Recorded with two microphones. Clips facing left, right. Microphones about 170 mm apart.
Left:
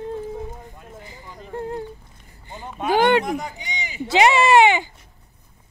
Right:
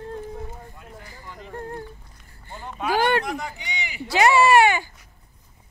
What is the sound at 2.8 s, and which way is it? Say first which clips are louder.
Speech: left 4 dB; 20° left (ahead or behind).